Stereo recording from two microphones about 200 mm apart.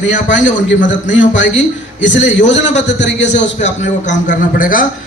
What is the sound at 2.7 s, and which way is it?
Speech, 65° left (ahead or behind).